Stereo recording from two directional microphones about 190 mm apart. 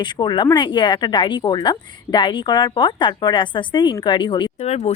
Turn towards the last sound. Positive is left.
turn(degrees=35)  # may be behind; listen again after turning